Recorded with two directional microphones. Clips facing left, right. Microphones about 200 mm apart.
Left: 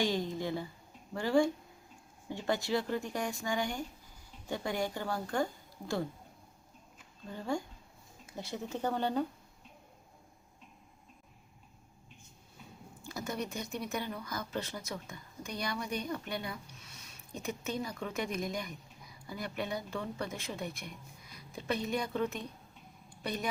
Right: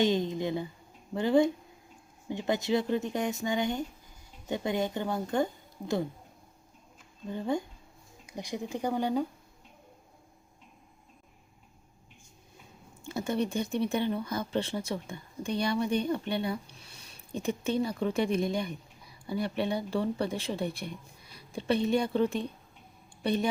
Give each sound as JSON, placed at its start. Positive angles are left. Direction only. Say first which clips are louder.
{"t": 0.0, "sound": "speech", "louder": "right 5 dB", "side_deg": -20}
{"t": 7.3, "sound": "speech", "louder": "right 5 dB", "side_deg": -20}
{"t": 13.0, "sound": "speech", "louder": "right 8 dB", "side_deg": -25}
{"t": 23.0, "sound": "a sound", "louder": "right 8 dB", "side_deg": -30}